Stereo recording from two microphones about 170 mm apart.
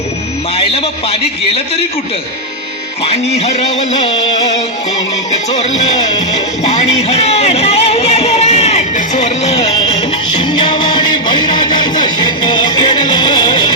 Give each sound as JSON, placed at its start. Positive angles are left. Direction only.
{"t": 0.5, "sound": "a man's voice", "side_deg": 35}
{"t": 3.0, "sound": "music", "side_deg": 40}
{"t": 5.3, "sound": "music", "side_deg": 40}
{"t": 10.3, "sound": "music", "side_deg": 25}